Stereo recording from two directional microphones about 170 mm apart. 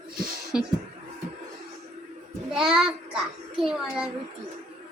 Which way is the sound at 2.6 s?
5° right (ahead or behind).